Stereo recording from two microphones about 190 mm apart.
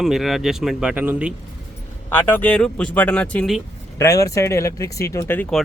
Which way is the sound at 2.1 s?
10° left (ahead or behind).